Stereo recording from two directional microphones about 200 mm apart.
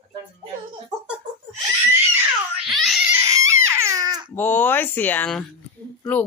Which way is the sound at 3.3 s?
15° right (ahead or behind).